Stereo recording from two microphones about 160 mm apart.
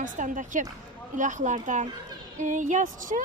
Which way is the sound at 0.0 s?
55° right (ahead or behind).